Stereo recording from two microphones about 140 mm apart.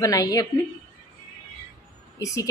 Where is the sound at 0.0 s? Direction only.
25° left (ahead or behind).